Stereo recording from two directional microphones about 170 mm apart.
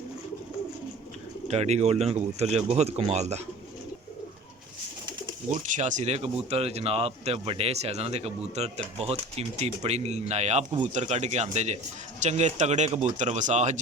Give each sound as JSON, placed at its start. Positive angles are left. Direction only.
{"t": 1.5, "sound": "speech", "side_deg": -40}
{"t": 5.5, "sound": "speech", "side_deg": -45}